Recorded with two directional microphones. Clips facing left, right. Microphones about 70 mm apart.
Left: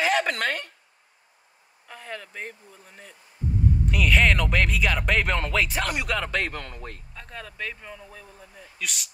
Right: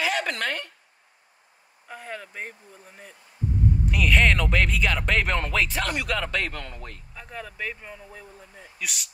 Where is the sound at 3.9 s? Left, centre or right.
Centre.